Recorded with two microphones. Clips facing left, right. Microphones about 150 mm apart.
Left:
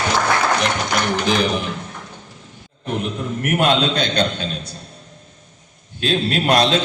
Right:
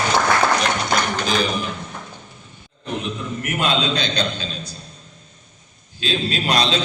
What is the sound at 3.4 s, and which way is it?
A man's voice, 55° left (ahead or behind).